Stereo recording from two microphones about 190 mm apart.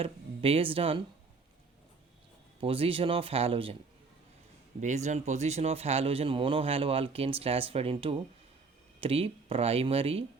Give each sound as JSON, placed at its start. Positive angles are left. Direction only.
{"t": 0.0, "sound": "speech", "side_deg": -30}
{"t": 2.6, "sound": "speech", "side_deg": -30}
{"t": 4.8, "sound": "a man's voice", "side_deg": -40}